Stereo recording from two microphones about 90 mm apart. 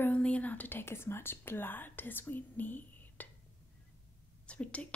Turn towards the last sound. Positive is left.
turn(degrees=15)  # may be behind; listen again after turning